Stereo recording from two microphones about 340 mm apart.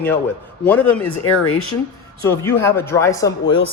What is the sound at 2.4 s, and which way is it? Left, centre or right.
Speech, centre.